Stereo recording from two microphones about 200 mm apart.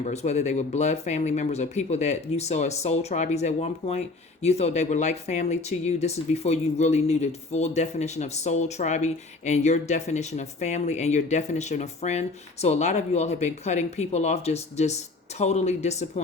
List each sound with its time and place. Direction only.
0.0 s speech: 35° left (ahead or behind)